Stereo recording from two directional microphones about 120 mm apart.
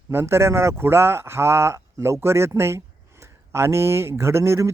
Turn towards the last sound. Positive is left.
turn(degrees=-25)  # may be behind; listen again after turning